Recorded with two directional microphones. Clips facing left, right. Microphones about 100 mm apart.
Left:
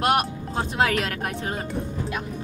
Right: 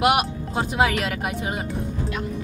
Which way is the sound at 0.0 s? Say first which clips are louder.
Right 2 dB; 5° right (ahead or behind).